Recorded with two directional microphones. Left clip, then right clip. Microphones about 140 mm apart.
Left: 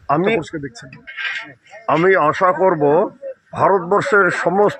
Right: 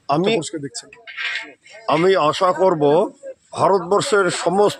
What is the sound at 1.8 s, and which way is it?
Speech, 10° right (ahead or behind).